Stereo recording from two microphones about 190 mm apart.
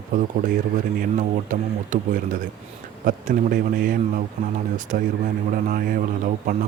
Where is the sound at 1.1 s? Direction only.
40° right (ahead or behind).